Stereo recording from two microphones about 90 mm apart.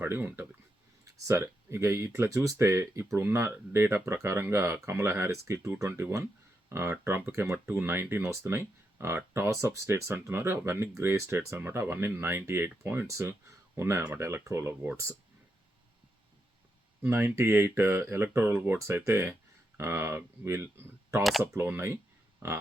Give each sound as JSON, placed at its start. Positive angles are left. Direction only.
{"t": 0.0, "sound": "speech", "side_deg": -25}
{"t": 17.1, "sound": "speech", "side_deg": -25}